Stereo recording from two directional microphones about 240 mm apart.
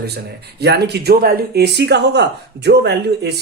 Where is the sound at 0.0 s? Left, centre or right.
Right.